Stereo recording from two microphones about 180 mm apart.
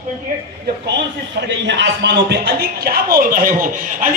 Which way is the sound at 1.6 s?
70° right (ahead or behind).